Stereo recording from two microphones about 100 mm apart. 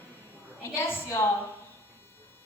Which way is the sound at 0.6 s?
25° left (ahead or behind).